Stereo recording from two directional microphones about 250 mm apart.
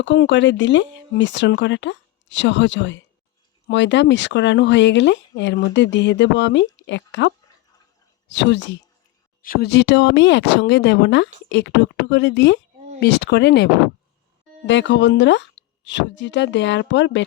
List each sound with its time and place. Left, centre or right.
0.0 s speech: left
14.7 s speech: left